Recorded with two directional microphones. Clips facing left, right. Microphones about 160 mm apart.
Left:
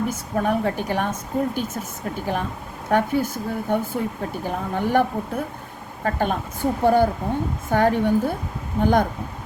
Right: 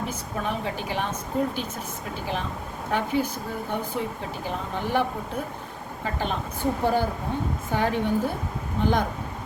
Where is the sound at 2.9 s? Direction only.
50° left (ahead or behind).